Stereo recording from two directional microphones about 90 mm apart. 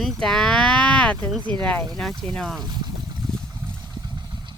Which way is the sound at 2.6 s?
50° right (ahead or behind).